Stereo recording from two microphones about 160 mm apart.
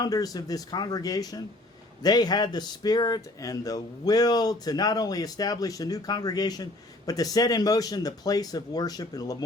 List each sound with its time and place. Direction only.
0.0 s speech: 25° left (ahead or behind)